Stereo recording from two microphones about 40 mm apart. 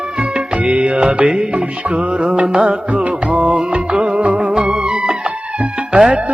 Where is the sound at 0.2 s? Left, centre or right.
Right.